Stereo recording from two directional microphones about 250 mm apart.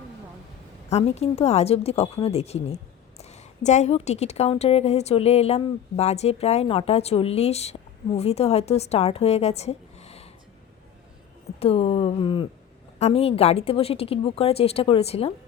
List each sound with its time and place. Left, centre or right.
0.9 s speech: left
11.6 s speech: left